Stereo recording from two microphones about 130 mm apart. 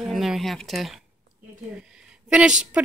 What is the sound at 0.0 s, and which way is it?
Speech, centre (ahead or behind).